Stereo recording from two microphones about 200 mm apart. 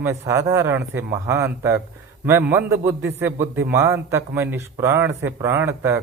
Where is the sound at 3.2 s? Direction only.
10° right (ahead or behind).